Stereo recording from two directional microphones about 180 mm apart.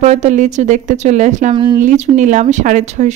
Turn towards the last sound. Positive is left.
turn(degrees=-40)  # may be behind; listen again after turning